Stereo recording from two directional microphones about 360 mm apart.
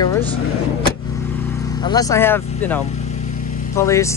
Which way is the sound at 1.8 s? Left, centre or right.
Centre.